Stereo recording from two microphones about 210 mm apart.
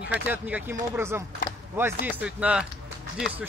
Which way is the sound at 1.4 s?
40° left (ahead or behind).